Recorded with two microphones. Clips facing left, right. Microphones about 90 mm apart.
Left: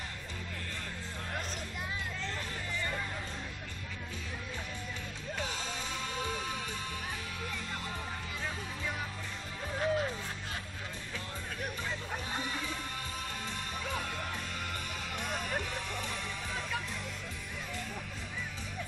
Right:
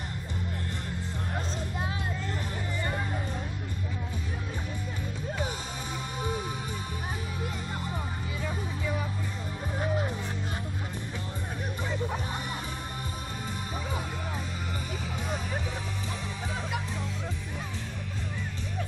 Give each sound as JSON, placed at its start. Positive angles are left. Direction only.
{"t": 9.8, "sound": "music", "side_deg": -15}
{"t": 15.2, "sound": "music", "side_deg": -5}